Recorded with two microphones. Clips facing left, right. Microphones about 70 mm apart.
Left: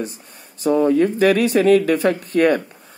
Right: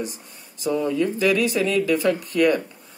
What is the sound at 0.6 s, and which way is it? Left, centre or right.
Speech, left.